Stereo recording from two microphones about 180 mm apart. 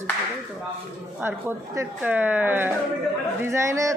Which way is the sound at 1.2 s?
10° right (ahead or behind).